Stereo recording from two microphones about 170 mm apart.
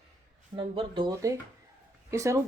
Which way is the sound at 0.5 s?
30° right (ahead or behind).